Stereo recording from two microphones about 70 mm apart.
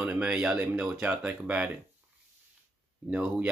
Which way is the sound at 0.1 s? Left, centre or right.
Centre.